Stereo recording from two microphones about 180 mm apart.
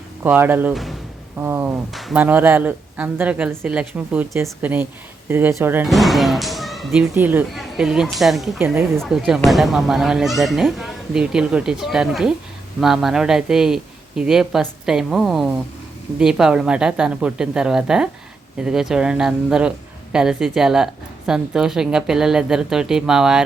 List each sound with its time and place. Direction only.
0.2 s speech: 10° right (ahead or behind)
1.9 s speech: centre (ahead or behind)
5.9 s speech: centre (ahead or behind)
8.6 s speech: 10° right (ahead or behind)
9.0 s speech: centre (ahead or behind)